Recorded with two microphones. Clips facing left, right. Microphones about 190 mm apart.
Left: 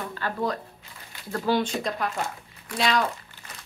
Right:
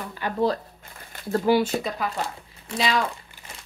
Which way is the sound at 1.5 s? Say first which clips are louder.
Right 3 dB; 5° right (ahead or behind).